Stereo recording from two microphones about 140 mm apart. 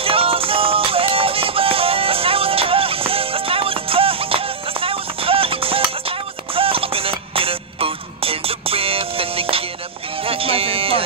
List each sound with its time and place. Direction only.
0.0 s music: 40° right (ahead or behind)